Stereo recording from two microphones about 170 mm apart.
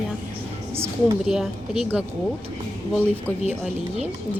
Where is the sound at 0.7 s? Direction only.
15° right (ahead or behind).